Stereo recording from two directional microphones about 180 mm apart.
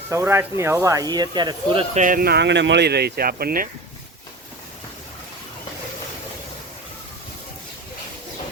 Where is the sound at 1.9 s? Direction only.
50° right (ahead or behind).